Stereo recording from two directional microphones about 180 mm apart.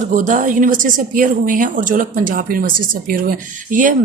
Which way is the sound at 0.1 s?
45° right (ahead or behind).